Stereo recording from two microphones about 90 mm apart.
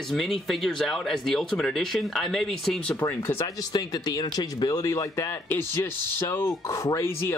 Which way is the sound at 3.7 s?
45° left (ahead or behind).